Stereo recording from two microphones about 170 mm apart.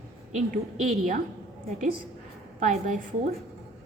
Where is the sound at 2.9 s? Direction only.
45° right (ahead or behind).